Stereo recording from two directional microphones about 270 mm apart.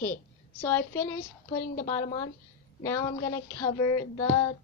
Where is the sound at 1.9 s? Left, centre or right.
Centre.